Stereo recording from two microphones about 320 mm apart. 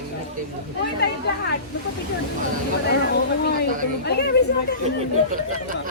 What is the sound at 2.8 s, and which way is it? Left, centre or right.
Speech, left.